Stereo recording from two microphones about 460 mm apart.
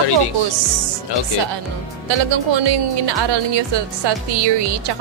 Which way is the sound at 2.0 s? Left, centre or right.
Right.